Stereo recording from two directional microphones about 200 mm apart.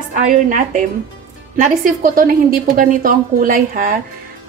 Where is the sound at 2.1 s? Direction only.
45° right (ahead or behind).